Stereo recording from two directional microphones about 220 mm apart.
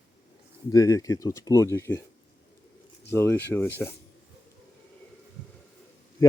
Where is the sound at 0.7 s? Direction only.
15° left (ahead or behind).